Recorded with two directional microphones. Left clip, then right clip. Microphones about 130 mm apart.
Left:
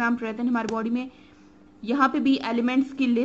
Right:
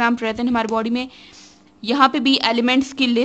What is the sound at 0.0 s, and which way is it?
A woman's voice, 30° right (ahead or behind).